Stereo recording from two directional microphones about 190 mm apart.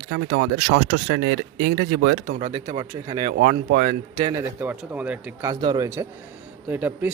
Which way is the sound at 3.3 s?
60° right (ahead or behind).